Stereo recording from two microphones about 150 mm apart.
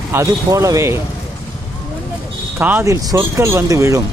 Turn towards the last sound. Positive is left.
turn(degrees=-20)  # may be behind; listen again after turning